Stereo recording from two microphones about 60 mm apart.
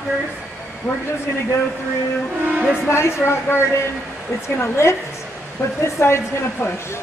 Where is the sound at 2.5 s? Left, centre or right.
Centre.